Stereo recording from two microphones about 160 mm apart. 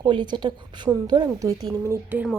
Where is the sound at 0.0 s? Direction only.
30° right (ahead or behind).